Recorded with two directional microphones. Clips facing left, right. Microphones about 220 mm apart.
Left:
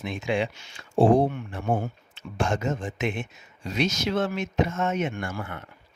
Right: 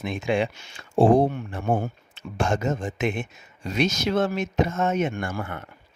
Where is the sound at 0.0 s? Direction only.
50° right (ahead or behind).